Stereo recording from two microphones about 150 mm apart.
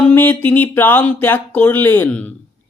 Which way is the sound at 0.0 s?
15° left (ahead or behind).